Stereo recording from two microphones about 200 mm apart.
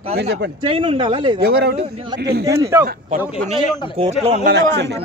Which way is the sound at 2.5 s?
15° right (ahead or behind).